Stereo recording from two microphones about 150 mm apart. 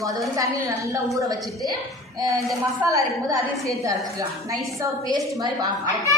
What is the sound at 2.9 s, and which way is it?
A woman's voice, 20° right (ahead or behind).